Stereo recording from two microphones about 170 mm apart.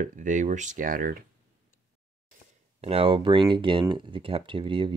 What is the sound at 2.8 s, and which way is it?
Speech, 35° right (ahead or behind).